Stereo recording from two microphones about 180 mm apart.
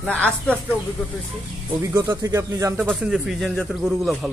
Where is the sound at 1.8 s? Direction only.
15° right (ahead or behind).